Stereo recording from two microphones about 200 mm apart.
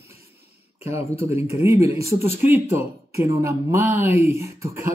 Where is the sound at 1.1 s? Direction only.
30° left (ahead or behind).